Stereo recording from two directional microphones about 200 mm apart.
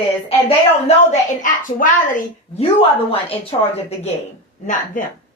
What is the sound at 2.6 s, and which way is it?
A woman's voice, 30° left (ahead or behind).